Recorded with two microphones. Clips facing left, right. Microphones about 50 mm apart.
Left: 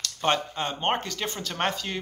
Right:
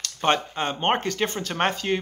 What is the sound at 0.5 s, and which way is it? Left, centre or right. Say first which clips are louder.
Speech: right 3 dB; right.